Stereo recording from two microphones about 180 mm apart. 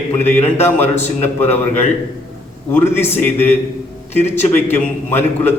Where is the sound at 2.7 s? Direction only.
10° left (ahead or behind).